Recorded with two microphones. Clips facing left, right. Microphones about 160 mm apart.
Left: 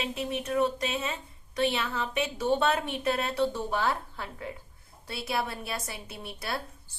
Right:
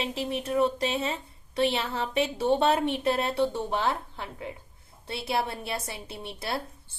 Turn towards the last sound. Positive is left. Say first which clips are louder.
# right 2 dB
turn(degrees=-25)  # may be behind; listen again after turning